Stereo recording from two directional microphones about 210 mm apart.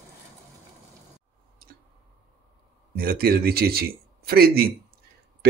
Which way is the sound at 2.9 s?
45° right (ahead or behind).